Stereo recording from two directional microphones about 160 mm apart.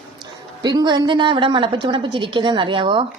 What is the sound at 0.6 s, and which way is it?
A woman's voice, 25° right (ahead or behind).